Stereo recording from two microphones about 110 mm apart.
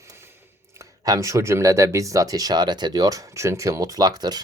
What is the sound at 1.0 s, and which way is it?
Speech, 30° right (ahead or behind).